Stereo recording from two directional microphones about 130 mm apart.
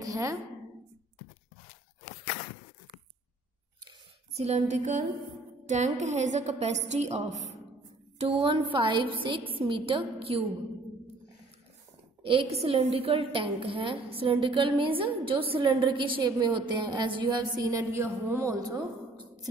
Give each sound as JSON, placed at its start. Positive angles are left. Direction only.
{"t": 0.0, "sound": "a sound", "side_deg": -25}
{"t": 4.3, "sound": "a woman's voice", "side_deg": -55}
{"t": 8.2, "sound": "a woman's voice", "side_deg": -45}
{"t": 12.2, "sound": "a woman's voice", "side_deg": -40}